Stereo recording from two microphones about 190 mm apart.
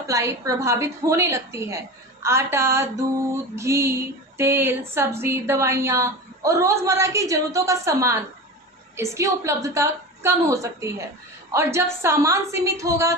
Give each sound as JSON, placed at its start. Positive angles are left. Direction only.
{"t": 0.1, "sound": "a woman's voice", "side_deg": -15}